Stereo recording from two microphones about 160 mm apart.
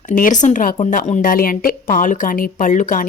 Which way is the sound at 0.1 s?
50° left (ahead or behind).